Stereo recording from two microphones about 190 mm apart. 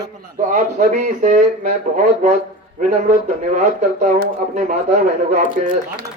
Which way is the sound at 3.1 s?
40° right (ahead or behind).